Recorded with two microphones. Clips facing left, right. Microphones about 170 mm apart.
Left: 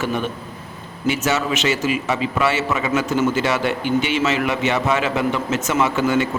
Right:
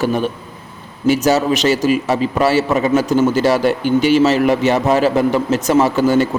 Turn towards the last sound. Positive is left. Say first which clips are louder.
# right 5 dB
turn(degrees=-35)  # may be behind; listen again after turning